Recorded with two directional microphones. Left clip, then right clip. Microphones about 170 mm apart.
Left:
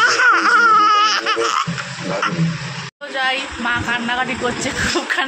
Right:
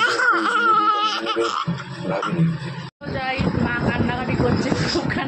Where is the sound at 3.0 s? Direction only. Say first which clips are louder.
Left 5 dB; centre (ahead or behind).